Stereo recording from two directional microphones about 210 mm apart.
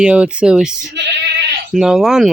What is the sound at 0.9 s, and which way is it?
Bleat, 55° right (ahead or behind).